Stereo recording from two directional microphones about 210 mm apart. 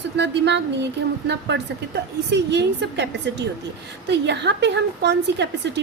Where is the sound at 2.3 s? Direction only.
55° right (ahead or behind).